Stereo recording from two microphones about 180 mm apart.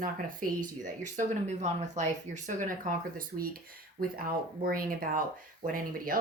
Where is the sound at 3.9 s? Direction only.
55° right (ahead or behind).